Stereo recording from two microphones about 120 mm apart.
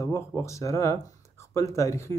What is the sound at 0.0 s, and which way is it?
Speech, 25° left (ahead or behind).